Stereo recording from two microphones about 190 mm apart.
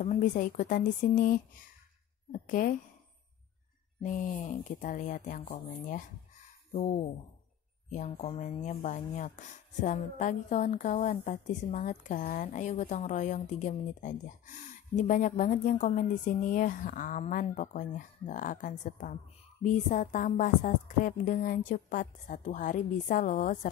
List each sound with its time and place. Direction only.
0.0 s a woman's voice: 40° left (ahead or behind)
4.0 s a woman's voice: 45° left (ahead or behind)